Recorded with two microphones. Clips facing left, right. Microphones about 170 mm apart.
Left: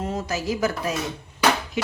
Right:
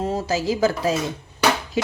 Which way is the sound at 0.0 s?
30° right (ahead or behind).